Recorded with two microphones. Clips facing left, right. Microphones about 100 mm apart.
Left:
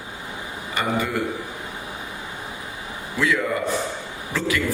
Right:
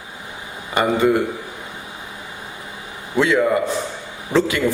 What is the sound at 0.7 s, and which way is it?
Speech, 25° right (ahead or behind).